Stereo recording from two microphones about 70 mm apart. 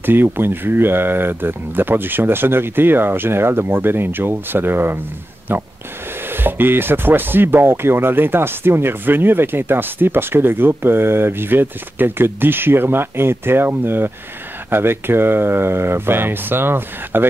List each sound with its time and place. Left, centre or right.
0.0 s speech: right